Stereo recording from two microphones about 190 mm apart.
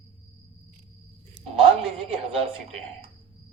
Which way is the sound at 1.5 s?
30° right (ahead or behind).